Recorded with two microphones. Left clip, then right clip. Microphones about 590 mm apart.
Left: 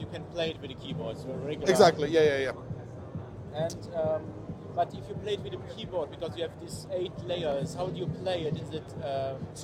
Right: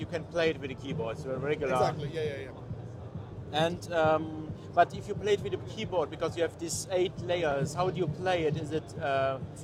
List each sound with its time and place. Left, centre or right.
0.1 s speech: right
1.6 s speech: left
3.8 s a man's voice: right
6.7 s speech: right
7.0 s a man's voice: right